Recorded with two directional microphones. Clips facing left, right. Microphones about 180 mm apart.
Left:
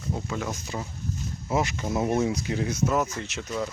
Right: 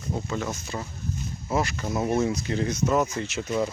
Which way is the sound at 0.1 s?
10° left (ahead or behind).